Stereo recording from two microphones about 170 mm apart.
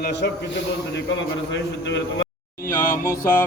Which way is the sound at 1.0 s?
90° left.